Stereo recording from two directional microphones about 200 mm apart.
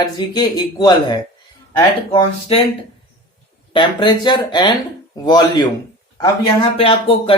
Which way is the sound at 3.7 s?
25° left (ahead or behind).